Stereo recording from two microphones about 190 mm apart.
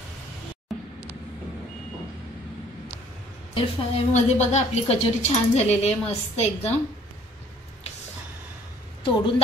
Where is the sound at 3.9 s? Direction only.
35° left (ahead or behind).